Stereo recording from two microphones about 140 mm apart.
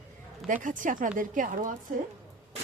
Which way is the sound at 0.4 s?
70° right (ahead or behind).